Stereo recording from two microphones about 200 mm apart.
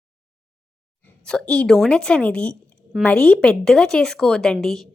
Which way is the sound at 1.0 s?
5° left (ahead or behind).